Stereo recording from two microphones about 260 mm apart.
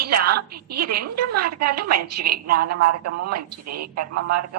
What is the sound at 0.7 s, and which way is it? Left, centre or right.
A woman's voice, right.